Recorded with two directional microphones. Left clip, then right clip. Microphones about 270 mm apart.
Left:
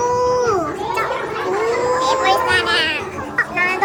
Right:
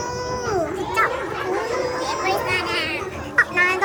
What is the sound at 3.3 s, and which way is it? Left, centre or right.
Chatter, right.